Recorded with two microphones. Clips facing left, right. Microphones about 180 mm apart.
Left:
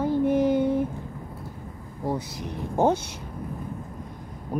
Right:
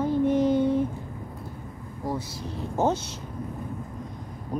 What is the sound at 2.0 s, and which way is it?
Speech, 20° left (ahead or behind).